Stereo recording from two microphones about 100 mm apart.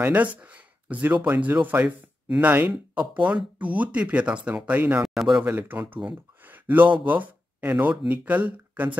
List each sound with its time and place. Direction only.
0.0 s speech: 15° right (ahead or behind)
5.0 s a man's voice: centre (ahead or behind)
5.4 s speech: 20° right (ahead or behind)
6.5 s a sound: 15° right (ahead or behind)
7.1 s speech: 15° right (ahead or behind)